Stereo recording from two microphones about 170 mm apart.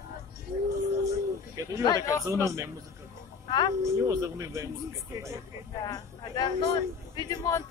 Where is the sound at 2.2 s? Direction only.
20° right (ahead or behind).